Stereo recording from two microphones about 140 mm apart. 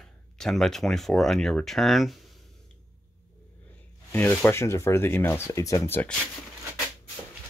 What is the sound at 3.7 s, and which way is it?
Speech, 10° left (ahead or behind).